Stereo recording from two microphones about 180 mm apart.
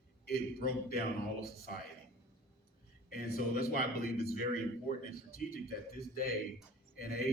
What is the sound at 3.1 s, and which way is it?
A man's voice, 55° left (ahead or behind).